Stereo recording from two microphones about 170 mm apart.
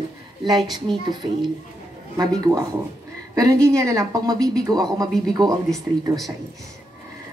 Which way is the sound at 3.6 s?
20° right (ahead or behind).